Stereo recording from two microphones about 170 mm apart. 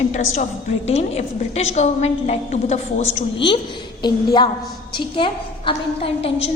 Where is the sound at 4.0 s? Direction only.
25° left (ahead or behind).